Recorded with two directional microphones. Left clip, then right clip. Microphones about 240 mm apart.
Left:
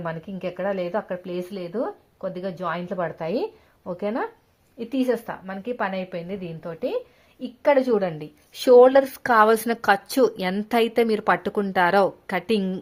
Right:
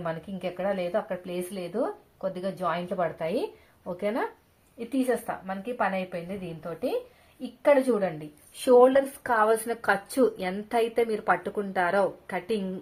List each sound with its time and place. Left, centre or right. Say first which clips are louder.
0.0 s speech: left 2 dB; left